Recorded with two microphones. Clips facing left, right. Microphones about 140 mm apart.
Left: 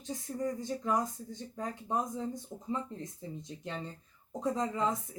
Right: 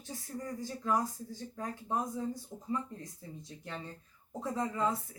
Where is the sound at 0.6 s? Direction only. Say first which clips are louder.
Right 4 dB; 20° left (ahead or behind).